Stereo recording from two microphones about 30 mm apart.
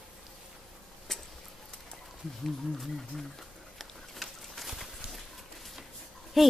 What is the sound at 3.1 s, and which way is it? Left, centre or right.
Speech, centre.